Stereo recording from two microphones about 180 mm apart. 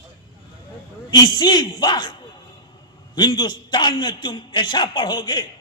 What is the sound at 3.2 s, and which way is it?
A man's voice, 25° left (ahead or behind).